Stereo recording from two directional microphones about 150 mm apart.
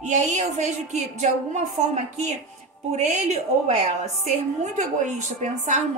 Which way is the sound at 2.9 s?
50° right (ahead or behind).